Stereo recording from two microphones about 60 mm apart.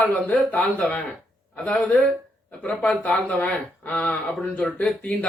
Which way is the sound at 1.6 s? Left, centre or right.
Left.